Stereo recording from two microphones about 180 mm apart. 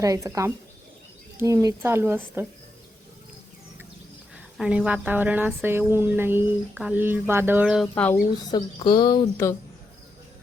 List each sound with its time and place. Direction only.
0.0 s speech: 20° right (ahead or behind)
4.5 s speech: 5° right (ahead or behind)
8.4 s a woman's voice: 25° left (ahead or behind)